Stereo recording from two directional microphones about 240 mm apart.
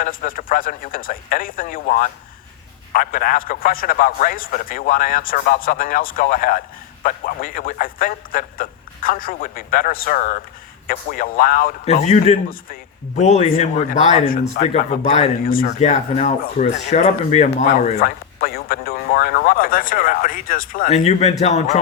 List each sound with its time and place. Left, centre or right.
0.0 s speech: left